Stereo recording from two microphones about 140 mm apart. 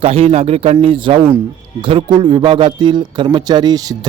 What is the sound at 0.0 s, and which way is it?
A man's voice, 45° right (ahead or behind).